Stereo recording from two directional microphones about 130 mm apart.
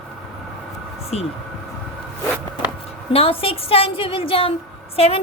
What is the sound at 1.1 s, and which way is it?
Speech, 55° left (ahead or behind).